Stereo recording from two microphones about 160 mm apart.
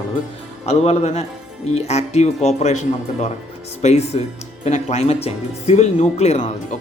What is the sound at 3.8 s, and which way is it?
A man's voice, 45° left (ahead or behind).